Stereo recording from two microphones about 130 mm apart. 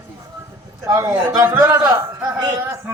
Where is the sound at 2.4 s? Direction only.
30° right (ahead or behind).